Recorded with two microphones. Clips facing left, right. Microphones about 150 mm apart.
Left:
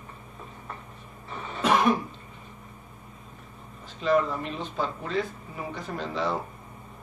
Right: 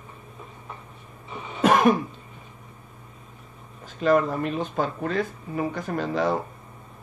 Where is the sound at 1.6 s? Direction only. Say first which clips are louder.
Right 4 dB; 50° right (ahead or behind).